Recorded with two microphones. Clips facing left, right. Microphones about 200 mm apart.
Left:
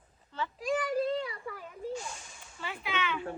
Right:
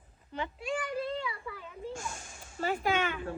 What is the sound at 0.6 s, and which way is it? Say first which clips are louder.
Child singing: left 6 dB; 40° left (ahead or behind).